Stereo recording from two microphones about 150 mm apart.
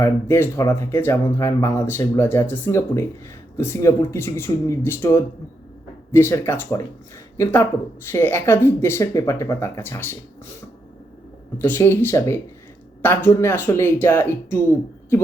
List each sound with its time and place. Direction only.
0.0 s speech: 15° left (ahead or behind)
11.5 s speech: 15° left (ahead or behind)